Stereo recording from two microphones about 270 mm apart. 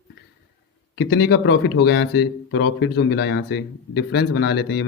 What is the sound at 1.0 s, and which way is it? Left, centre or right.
Speech, left.